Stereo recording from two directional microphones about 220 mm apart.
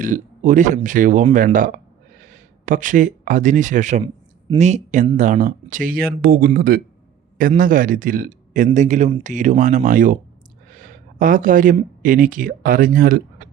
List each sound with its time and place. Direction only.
0.0 s a man's voice: 35° right (ahead or behind)